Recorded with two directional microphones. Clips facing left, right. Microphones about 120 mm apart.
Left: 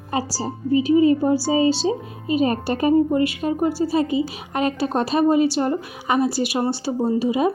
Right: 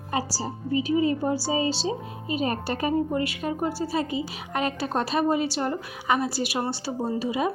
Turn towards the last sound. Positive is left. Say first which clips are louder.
# left 6 dB
turn(degrees=20)  # may be behind; listen again after turning